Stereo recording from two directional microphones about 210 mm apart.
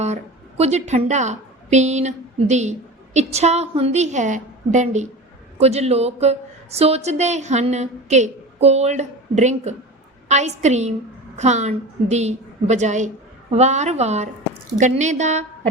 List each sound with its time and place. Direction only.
0.0 s a woman's voice: 30° right (ahead or behind)